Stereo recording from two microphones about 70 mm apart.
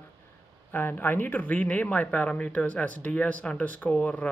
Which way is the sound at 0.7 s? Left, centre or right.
Left.